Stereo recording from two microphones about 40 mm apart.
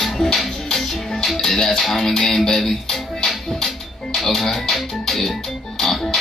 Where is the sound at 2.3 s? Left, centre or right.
Centre.